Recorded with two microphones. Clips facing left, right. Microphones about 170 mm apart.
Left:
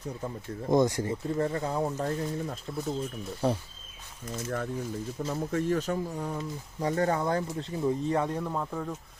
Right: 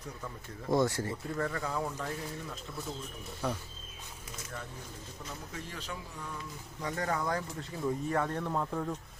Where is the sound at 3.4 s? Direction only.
30° left (ahead or behind).